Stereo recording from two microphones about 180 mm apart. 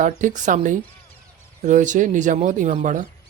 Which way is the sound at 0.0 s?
45° right (ahead or behind).